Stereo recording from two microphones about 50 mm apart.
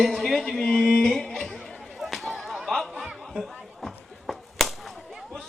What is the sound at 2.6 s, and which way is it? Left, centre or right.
Snicker, centre.